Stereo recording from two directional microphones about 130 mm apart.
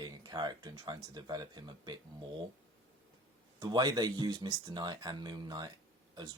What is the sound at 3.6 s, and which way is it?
Speech, 30° right (ahead or behind).